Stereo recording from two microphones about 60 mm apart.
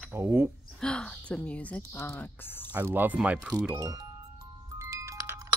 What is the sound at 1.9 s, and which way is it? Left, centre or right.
Speech, left.